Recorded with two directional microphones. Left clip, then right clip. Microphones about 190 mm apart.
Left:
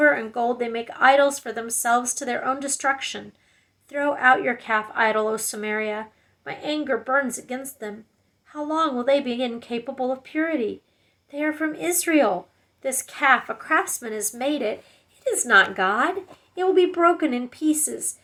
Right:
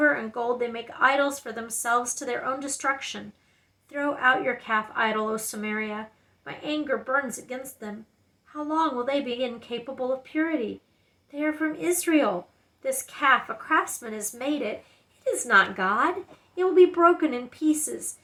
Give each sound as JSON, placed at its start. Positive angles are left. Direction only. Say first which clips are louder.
{"t": 0.0, "sound": "speech", "louder": "left 4 dB", "side_deg": 20}